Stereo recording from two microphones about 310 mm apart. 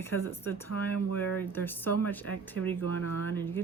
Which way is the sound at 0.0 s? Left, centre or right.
Centre.